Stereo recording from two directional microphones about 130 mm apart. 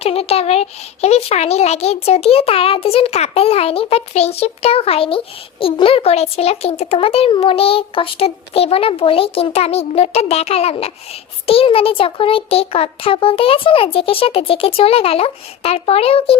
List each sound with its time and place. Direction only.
0.0 s a child's voice: 50° left (ahead or behind)